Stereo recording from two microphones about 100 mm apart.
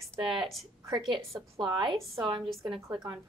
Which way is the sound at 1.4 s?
50° right (ahead or behind).